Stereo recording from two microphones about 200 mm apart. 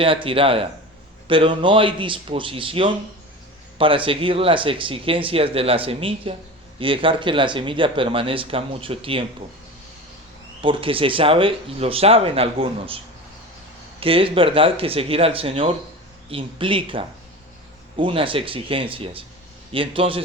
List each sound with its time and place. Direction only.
0.0 s speech: 25° right (ahead or behind)
10.6 s speech: 25° right (ahead or behind)
14.0 s speech: 25° right (ahead or behind)